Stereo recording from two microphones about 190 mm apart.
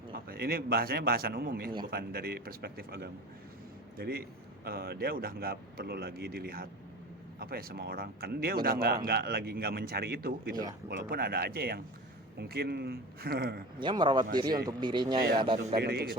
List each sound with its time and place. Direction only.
0.1 s a man's voice: 50° right (ahead or behind)
13.7 s speech: 25° right (ahead or behind)
15.8 s speech: 55° right (ahead or behind)